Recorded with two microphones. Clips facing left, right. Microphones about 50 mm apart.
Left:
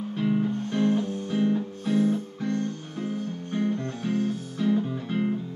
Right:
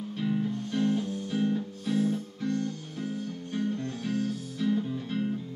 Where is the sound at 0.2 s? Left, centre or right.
Left.